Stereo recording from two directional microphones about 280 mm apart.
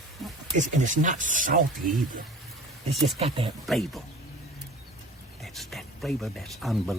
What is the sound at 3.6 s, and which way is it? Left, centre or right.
Speech, centre.